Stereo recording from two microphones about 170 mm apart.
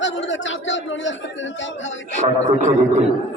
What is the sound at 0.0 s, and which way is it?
Speech, 90° left.